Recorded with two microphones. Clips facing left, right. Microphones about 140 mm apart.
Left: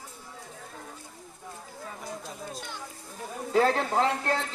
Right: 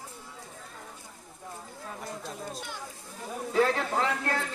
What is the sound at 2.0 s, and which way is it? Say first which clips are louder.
Speech: right 1 dB; centre (ahead or behind).